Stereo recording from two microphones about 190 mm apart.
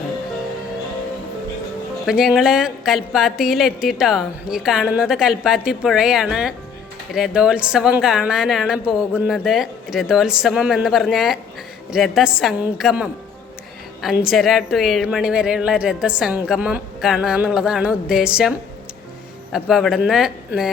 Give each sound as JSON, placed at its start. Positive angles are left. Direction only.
{"t": 2.0, "sound": "a woman's voice", "side_deg": -5}
{"t": 19.5, "sound": "a woman's voice", "side_deg": -5}